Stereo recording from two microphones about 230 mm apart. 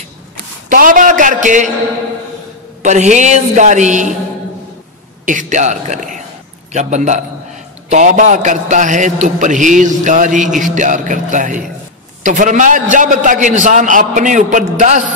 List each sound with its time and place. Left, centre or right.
0.7 s a man's voice: right
2.8 s a man's voice: right
5.2 s a man's voice: right